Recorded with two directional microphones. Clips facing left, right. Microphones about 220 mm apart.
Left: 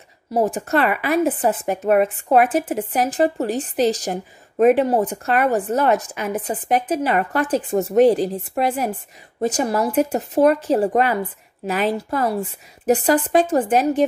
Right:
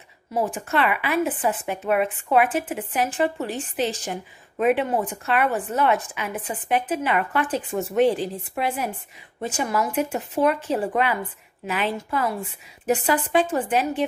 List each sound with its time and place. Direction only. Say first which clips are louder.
0.3 s speech: left 5 dB; 40° left (ahead or behind)